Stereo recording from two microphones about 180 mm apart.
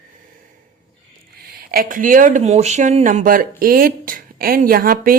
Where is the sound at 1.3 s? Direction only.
60° right (ahead or behind).